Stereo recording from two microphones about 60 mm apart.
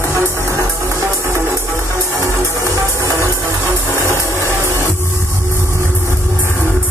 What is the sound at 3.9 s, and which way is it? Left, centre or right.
Vehicle, right.